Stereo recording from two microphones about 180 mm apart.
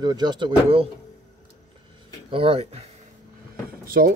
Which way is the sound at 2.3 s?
30° right (ahead or behind).